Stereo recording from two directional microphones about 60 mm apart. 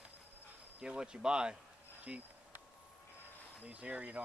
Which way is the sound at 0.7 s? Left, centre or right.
Centre.